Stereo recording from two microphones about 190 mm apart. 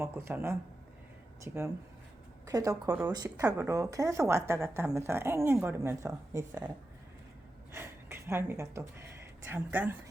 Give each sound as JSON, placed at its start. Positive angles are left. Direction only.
{"t": 0.0, "sound": "speech", "side_deg": -15}
{"t": 7.7, "sound": "speech", "side_deg": -15}